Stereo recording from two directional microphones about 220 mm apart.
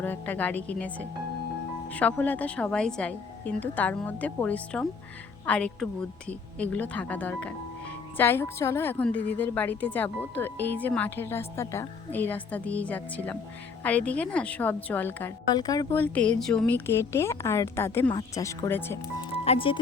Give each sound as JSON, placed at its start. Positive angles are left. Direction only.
{"t": 0.0, "sound": "a woman's voice", "side_deg": 10}
{"t": 19.3, "sound": "speech", "side_deg": 25}